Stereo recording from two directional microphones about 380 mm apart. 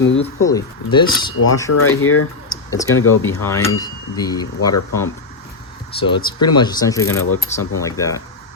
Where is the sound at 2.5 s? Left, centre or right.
Centre.